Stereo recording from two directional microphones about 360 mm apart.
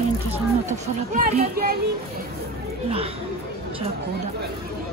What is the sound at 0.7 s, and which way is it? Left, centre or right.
A woman's voice, right.